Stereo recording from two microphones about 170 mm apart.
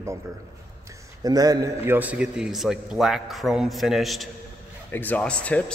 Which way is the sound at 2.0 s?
5° right (ahead or behind).